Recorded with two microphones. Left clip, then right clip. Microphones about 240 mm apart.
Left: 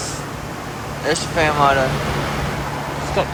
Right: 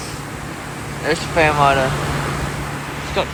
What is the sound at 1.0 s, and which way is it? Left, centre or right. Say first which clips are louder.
Speech: right 2 dB; centre.